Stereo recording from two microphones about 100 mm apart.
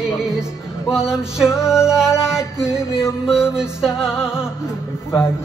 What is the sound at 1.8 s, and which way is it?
Music, 30° left (ahead or behind).